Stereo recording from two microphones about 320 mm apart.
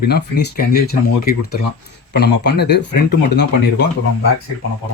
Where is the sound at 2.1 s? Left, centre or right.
Left.